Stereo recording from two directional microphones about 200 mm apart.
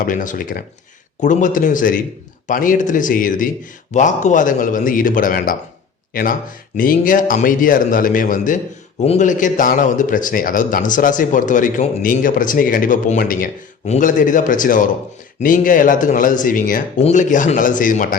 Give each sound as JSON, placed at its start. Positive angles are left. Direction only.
{"t": 0.0, "sound": "a man's voice", "side_deg": 40}